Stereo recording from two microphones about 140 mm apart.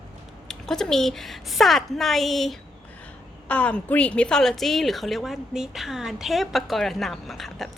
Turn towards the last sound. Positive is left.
turn(degrees=0)  # may be behind; listen again after turning